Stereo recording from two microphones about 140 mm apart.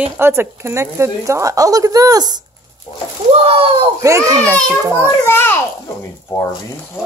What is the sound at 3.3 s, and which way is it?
Speech, 45° right (ahead or behind).